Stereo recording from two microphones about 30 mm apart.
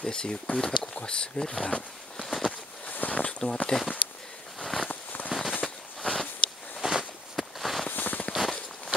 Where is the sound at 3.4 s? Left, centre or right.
Left.